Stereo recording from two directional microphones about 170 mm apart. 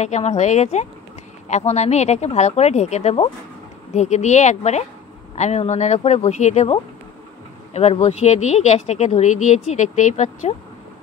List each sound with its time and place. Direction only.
0.0 s speech: 40° left (ahead or behind)